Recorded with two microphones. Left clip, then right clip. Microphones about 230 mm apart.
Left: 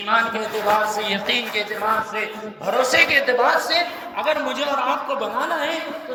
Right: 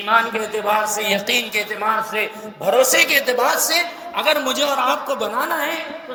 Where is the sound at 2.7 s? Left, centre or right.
Right.